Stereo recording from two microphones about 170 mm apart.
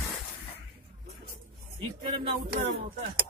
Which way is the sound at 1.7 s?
30° right (ahead or behind).